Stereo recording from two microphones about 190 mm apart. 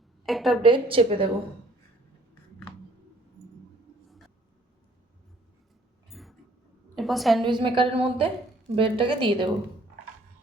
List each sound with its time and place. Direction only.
0.3 s a woman's voice: centre (ahead or behind)
0.6 s a woman's voice: 25° right (ahead or behind)
6.1 s a sound: centre (ahead or behind)
6.9 s a woman's voice: centre (ahead or behind)
7.4 s a woman's voice: 25° right (ahead or behind)